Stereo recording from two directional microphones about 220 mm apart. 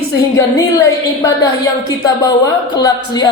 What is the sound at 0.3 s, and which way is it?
A woman's voice, 15° left (ahead or behind).